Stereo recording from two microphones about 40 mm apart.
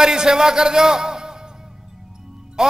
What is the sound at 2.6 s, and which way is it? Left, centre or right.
Music, centre.